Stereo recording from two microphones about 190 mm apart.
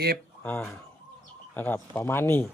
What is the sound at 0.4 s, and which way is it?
Speech, 10° left (ahead or behind).